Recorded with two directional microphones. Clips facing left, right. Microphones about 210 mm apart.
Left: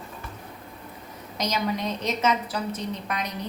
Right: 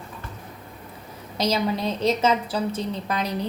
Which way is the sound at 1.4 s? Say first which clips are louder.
Right 4 dB; 30° right (ahead or behind).